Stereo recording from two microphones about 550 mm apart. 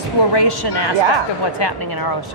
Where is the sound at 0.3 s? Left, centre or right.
Left.